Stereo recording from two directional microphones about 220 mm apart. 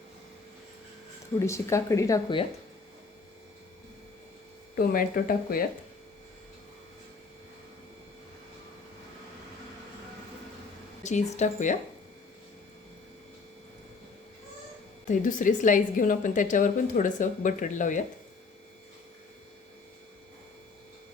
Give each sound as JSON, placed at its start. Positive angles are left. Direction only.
{"t": 1.4, "sound": "speech", "side_deg": 15}
{"t": 4.8, "sound": "a woman's voice", "side_deg": 40}
{"t": 11.0, "sound": "a woman's voice", "side_deg": 30}
{"t": 15.0, "sound": "a woman's voice", "side_deg": 35}